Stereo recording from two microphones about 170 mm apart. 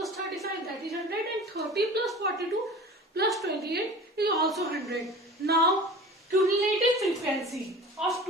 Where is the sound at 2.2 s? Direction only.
70° right (ahead or behind).